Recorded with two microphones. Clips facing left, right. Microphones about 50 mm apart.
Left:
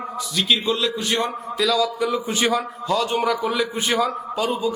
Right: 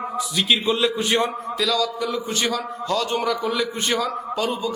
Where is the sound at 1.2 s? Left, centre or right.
Centre.